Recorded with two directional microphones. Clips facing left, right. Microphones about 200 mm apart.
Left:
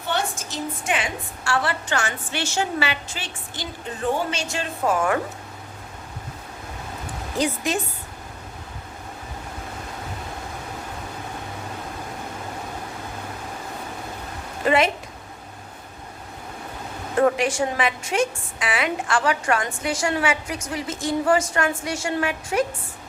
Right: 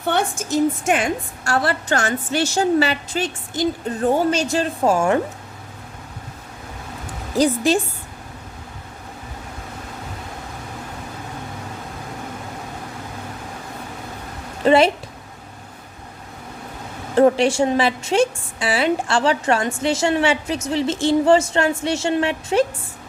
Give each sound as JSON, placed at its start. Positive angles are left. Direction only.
{"t": 0.0, "sound": "a woman's voice", "side_deg": -55}
{"t": 7.3, "sound": "a woman's voice", "side_deg": -35}
{"t": 14.6, "sound": "a woman's voice", "side_deg": -30}
{"t": 17.2, "sound": "a woman's voice", "side_deg": -30}